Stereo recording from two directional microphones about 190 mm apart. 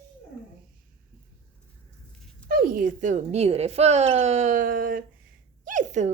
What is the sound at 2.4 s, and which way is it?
Speech, 50° right (ahead or behind).